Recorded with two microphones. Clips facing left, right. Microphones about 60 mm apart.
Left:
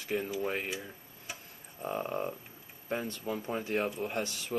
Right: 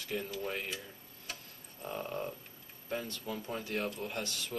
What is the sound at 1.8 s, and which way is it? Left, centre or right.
Speech, left.